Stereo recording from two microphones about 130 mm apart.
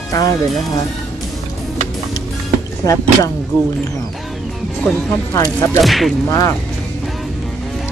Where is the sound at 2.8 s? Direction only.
25° left (ahead or behind).